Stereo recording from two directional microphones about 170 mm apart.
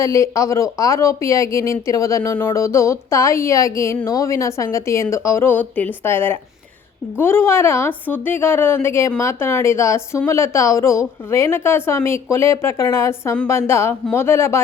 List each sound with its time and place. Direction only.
0.0 s a woman's voice: 20° left (ahead or behind)